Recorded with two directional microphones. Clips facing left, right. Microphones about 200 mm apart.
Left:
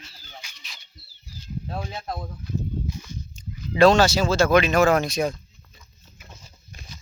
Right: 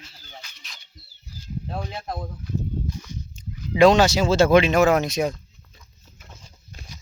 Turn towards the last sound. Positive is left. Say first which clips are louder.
# even
turn(degrees=10)  # may be behind; listen again after turning